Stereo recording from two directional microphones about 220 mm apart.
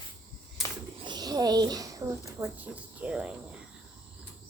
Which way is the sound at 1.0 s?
20° right (ahead or behind).